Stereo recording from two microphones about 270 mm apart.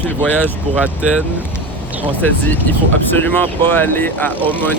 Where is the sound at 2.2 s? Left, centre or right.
Centre.